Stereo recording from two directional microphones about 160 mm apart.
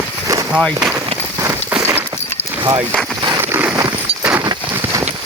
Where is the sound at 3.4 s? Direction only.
15° right (ahead or behind).